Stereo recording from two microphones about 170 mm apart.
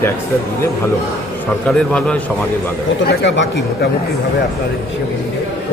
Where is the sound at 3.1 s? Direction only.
90° left.